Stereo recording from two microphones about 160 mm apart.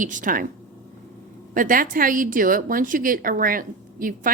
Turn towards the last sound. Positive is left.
turn(degrees=-60)  # may be behind; listen again after turning